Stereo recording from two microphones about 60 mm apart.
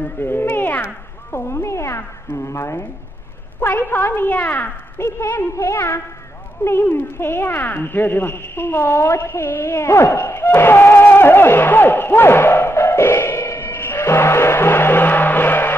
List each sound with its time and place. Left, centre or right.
0.0 s speech: left
1.3 s a woman's voice: left
4.9 s a woman's voice: left
9.5 s a sound: left